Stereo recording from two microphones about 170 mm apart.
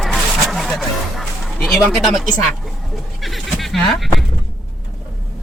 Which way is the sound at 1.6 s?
Centre (ahead or behind).